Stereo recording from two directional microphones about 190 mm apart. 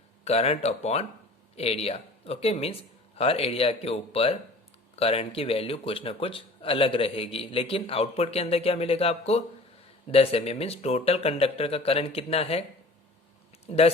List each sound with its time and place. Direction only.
0.3 s speech: 35° left (ahead or behind)
13.7 s speech: 35° left (ahead or behind)